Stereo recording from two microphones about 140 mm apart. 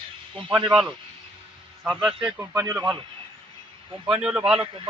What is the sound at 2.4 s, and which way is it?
Speech, 15° right (ahead or behind).